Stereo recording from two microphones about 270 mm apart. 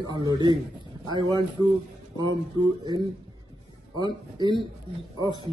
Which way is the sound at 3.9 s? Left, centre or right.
Centre.